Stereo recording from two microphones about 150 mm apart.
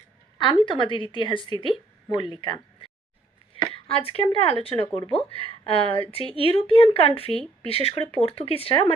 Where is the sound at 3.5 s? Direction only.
40° left (ahead or behind).